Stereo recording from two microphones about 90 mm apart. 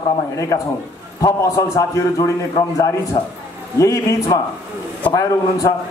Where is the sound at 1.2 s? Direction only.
40° left (ahead or behind).